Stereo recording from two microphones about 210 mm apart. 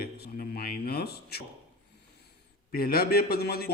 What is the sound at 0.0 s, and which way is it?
Speech, 45° left (ahead or behind).